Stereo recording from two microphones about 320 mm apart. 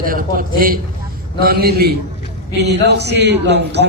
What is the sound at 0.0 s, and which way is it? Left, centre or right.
A man's voice, right.